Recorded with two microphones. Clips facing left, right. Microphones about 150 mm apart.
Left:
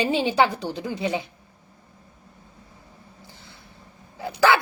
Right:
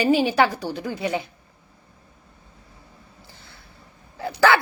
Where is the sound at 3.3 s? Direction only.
20° left (ahead or behind).